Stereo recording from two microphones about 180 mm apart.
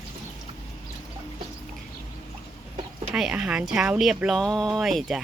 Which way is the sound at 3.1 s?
5° right (ahead or behind).